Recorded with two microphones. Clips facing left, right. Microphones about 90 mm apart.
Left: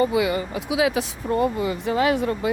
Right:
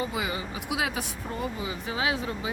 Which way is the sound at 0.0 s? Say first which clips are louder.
Left 10 dB; 80° left.